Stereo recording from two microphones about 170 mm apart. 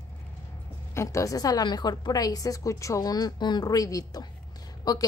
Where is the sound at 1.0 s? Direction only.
15° left (ahead or behind).